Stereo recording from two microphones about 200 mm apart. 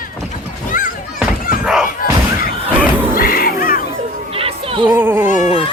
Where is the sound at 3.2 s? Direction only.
45° left (ahead or behind).